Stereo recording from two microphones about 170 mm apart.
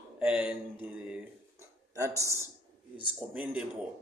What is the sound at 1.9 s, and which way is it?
Speech, 20° right (ahead or behind).